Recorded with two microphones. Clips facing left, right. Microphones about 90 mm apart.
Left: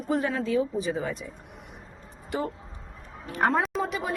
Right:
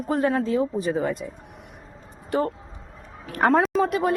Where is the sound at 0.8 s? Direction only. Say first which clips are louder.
Right 5 dB; 50° right (ahead or behind).